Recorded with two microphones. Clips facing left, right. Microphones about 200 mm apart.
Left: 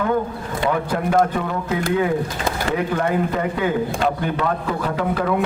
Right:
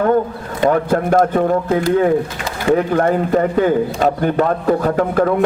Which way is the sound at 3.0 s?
45° right (ahead or behind).